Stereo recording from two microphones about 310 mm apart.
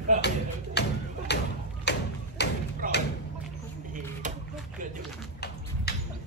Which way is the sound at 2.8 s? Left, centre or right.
Right.